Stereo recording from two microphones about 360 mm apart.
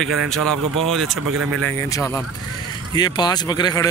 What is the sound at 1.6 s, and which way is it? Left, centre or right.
Speech, centre.